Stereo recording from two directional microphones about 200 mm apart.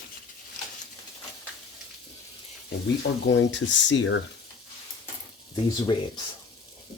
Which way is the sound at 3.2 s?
65° left (ahead or behind).